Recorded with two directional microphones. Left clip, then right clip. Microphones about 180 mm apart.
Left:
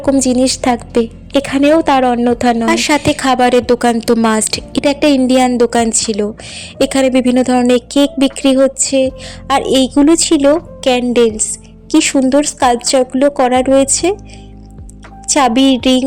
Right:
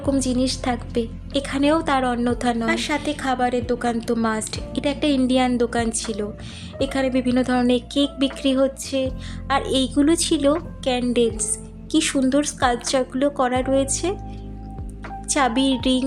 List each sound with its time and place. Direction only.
0.0 s a woman's voice: 40° left (ahead or behind)
10.8 s a sound: 40° left (ahead or behind)
11.0 s a woman's voice: 30° left (ahead or behind)
15.3 s a woman's voice: 35° left (ahead or behind)